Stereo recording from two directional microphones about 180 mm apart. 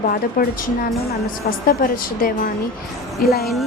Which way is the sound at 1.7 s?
55° left (ahead or behind).